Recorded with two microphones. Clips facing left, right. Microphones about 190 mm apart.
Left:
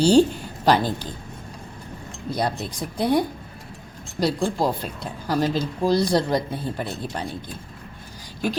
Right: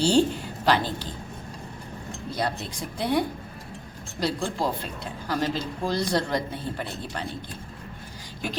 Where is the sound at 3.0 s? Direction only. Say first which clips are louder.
Left 4 dB; 40° left (ahead or behind).